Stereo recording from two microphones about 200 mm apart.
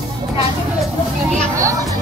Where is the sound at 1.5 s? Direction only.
15° right (ahead or behind).